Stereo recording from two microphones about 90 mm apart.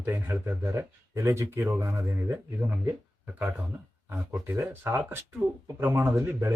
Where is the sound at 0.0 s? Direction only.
20° right (ahead or behind).